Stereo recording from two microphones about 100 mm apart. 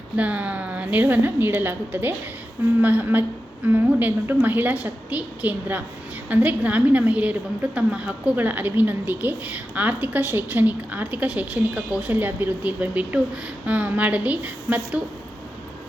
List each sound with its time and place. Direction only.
0.2 s a woman's voice: 15° right (ahead or behind)